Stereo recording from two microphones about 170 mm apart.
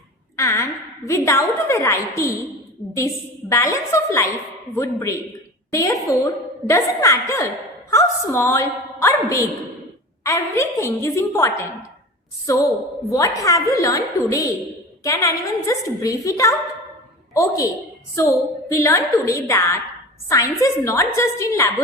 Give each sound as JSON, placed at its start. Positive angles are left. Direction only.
{"t": 0.3, "sound": "a woman's voice", "side_deg": 15}
{"t": 3.5, "sound": "a woman's voice", "side_deg": 15}
{"t": 18.7, "sound": "a woman's voice", "side_deg": 15}